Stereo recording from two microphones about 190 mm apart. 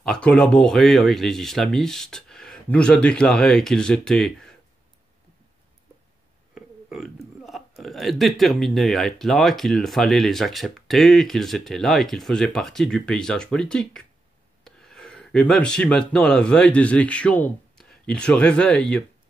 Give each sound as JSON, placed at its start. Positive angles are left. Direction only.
{"t": 0.0, "sound": "speech", "side_deg": 5}
{"t": 6.5, "sound": "speech", "side_deg": 0}